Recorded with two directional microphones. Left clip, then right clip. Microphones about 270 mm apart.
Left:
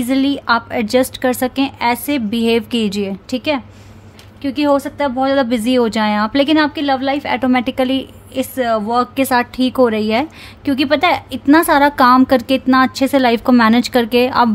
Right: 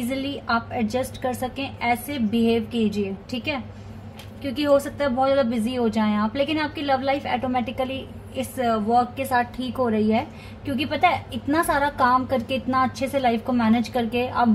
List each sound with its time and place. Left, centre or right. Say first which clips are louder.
0.1 s speech: left 10 dB; left